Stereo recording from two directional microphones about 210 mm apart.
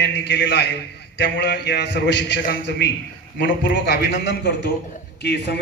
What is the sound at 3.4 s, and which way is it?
A man's voice, 40° left (ahead or behind).